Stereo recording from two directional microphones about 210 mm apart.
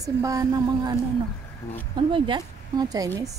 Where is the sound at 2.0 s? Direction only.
25° right (ahead or behind).